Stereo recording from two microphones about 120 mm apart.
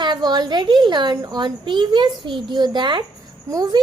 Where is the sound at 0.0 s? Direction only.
35° right (ahead or behind).